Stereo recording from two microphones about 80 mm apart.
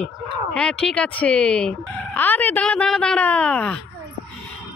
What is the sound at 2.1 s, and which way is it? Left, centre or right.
Speech, left.